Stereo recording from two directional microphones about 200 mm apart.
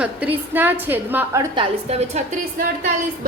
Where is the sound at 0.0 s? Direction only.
5° right (ahead or behind).